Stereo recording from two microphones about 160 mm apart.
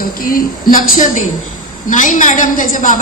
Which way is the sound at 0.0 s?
60° left (ahead or behind).